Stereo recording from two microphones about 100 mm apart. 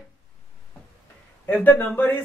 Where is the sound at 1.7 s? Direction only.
20° left (ahead or behind).